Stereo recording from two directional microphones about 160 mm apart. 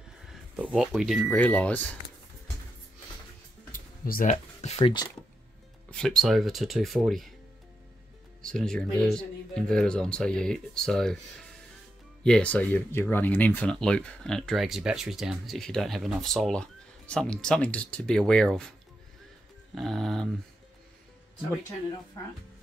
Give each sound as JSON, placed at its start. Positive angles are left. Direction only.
{"t": 0.3, "sound": "speech", "side_deg": -5}
{"t": 3.7, "sound": "music", "side_deg": 60}
{"t": 4.6, "sound": "speech", "side_deg": 40}
{"t": 5.9, "sound": "speech", "side_deg": 5}
{"t": 8.4, "sound": "speech", "side_deg": 5}
{"t": 12.2, "sound": "speech", "side_deg": 5}
{"t": 19.7, "sound": "speech", "side_deg": 0}